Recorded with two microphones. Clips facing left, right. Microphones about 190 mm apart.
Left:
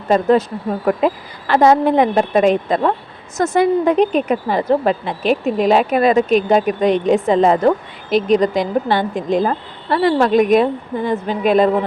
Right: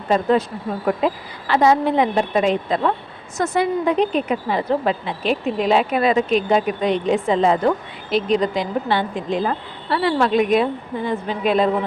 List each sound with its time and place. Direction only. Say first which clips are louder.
0.1 s a woman's voice: left 4 dB; 45° left (ahead or behind)